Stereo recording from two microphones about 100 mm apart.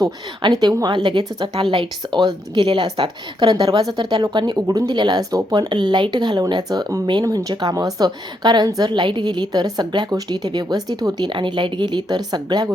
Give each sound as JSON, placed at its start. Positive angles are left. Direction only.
{"t": 0.4, "sound": "a woman's voice", "side_deg": -45}
{"t": 11.3, "sound": "a woman's voice", "side_deg": -55}